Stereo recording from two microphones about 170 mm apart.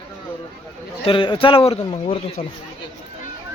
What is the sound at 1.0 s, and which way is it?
Speech, 30° left (ahead or behind).